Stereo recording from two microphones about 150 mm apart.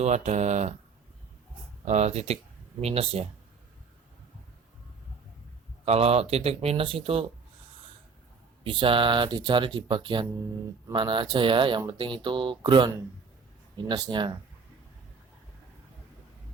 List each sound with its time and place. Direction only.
0.0 s speech: 50° right (ahead or behind)
1.8 s speech: 50° right (ahead or behind)
5.8 s speech: 45° right (ahead or behind)
8.6 s speech: 35° right (ahead or behind)